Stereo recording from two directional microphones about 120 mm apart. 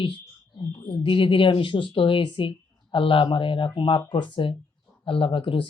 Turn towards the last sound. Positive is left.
turn(degrees=45)  # may be behind; listen again after turning